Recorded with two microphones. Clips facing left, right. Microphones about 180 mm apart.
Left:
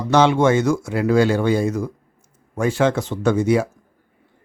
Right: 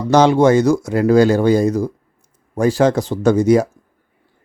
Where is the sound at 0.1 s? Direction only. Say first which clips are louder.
Right 4 dB; 40° right (ahead or behind).